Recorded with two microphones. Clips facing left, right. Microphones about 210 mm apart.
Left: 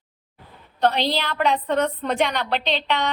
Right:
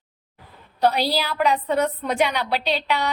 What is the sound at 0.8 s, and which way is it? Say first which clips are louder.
A woman's voice: right 1 dB; 10° right (ahead or behind).